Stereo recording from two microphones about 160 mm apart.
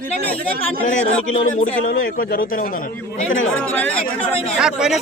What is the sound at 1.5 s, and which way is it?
Speech, 60° left (ahead or behind).